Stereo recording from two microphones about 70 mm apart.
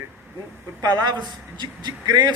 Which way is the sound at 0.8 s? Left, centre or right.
Right.